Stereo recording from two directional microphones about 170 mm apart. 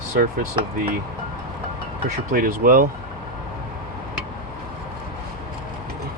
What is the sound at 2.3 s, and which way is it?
Speech, 55° right (ahead or behind).